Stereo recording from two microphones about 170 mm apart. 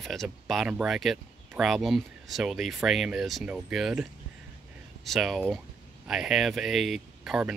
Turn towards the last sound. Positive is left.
turn(degrees=-5)  # may be behind; listen again after turning